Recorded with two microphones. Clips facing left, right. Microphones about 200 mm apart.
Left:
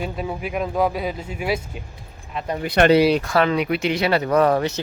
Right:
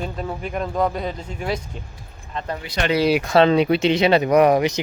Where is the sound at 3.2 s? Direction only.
25° right (ahead or behind).